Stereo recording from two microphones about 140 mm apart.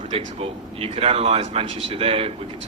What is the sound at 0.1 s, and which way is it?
Speech, 45° right (ahead or behind).